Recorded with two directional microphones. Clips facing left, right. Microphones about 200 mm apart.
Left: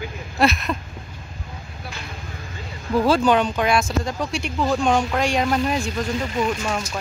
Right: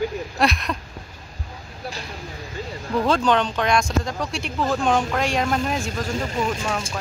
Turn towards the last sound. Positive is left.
turn(degrees=5)  # may be behind; listen again after turning